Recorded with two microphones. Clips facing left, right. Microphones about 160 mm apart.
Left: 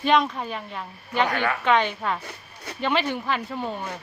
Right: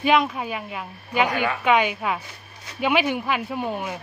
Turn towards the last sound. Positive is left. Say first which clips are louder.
# right 3 dB
turn(degrees=-10)  # may be behind; listen again after turning